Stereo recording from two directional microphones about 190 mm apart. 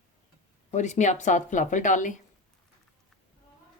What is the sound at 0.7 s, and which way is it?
A woman's voice, 40° left (ahead or behind).